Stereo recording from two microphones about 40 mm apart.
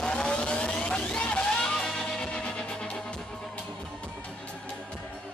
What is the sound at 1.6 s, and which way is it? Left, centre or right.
Music, centre.